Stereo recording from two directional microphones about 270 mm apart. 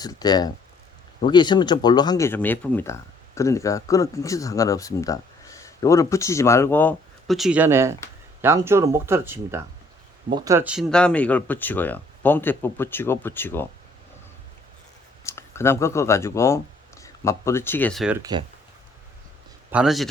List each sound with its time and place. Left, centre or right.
0.0 s speech: centre
15.2 s speech: centre
18.2 s speech: centre
19.7 s a man's voice: centre